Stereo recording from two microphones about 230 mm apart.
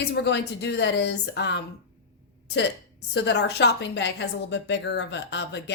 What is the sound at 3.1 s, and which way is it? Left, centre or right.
A woman's voice, left.